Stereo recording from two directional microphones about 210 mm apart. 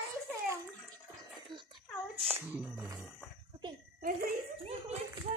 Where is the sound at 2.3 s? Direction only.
10° right (ahead or behind).